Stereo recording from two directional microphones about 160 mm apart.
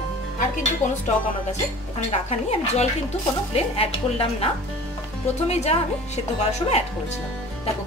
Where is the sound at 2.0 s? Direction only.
45° left (ahead or behind).